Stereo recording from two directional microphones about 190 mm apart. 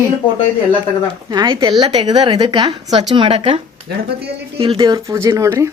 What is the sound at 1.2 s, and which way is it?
A woman's voice, 20° right (ahead or behind).